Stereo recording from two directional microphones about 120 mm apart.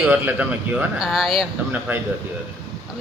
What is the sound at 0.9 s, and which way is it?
Speech, centre (ahead or behind).